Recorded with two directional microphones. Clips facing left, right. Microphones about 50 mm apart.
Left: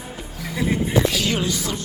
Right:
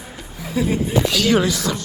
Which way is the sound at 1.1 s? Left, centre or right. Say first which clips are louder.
Right 6 dB; right.